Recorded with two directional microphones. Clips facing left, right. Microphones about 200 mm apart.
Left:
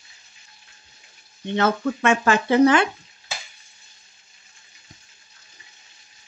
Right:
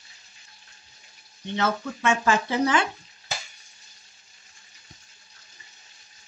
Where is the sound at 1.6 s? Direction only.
60° left (ahead or behind).